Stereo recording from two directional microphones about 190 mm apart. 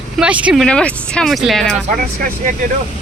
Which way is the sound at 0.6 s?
5° left (ahead or behind).